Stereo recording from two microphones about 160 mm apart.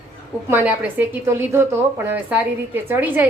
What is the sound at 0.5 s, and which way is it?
A woman's voice, 10° right (ahead or behind).